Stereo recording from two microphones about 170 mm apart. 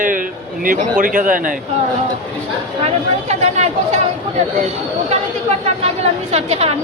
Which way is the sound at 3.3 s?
40° right (ahead or behind).